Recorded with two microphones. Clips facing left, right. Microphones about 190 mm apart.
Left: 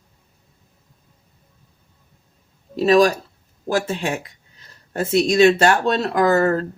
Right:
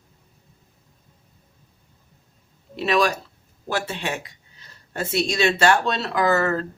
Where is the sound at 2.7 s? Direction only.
40° left (ahead or behind).